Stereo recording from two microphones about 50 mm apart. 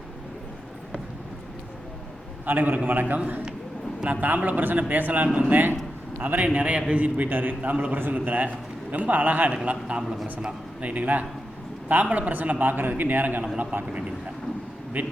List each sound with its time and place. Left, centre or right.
2.5 s a man's voice: right
7.3 s a man's voice: right
7.9 s a man's voice: right
15.0 s a man's voice: right